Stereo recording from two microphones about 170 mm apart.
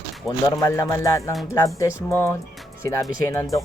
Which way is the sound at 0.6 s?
20° left (ahead or behind).